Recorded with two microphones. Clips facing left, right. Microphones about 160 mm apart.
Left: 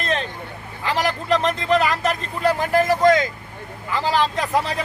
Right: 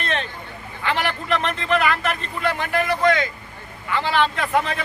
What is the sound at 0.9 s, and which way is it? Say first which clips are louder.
Speech: left 2 dB; 35° left (ahead or behind).